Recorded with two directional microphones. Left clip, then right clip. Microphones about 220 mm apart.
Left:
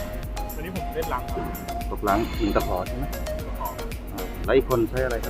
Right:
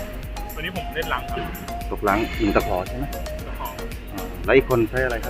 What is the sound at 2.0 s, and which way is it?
Speech, 25° right (ahead or behind).